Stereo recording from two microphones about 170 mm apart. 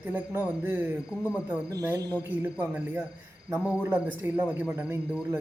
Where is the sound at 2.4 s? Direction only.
10° right (ahead or behind).